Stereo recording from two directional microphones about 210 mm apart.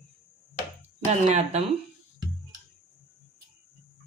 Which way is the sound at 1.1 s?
30° right (ahead or behind).